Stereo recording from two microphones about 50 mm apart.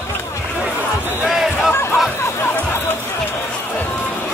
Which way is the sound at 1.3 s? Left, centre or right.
Centre.